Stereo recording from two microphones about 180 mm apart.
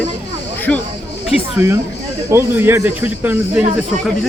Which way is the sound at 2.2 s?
15° right (ahead or behind).